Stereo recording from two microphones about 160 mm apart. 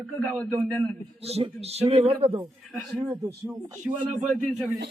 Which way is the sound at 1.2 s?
40° right (ahead or behind).